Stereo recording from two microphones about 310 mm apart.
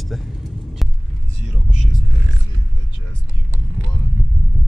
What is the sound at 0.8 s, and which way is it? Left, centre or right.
Heart sounds, centre.